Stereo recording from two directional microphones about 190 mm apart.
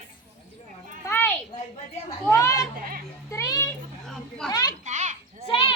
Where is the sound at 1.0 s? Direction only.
10° left (ahead or behind).